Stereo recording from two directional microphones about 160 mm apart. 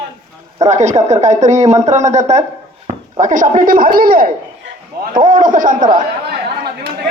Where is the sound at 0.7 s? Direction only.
45° right (ahead or behind).